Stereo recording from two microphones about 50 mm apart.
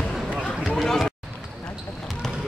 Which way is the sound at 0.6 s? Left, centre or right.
Centre.